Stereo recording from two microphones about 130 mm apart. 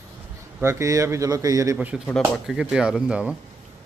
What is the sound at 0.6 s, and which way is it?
Speech, 25° right (ahead or behind).